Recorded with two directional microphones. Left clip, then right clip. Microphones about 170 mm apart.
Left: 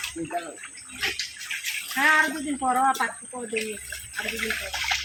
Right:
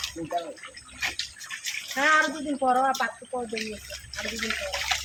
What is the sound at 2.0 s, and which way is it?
A woman's voice, 55° right (ahead or behind).